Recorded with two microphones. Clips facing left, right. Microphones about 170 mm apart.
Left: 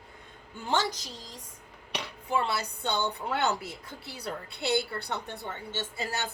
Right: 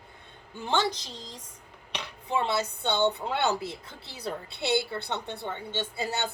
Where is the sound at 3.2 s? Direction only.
25° right (ahead or behind).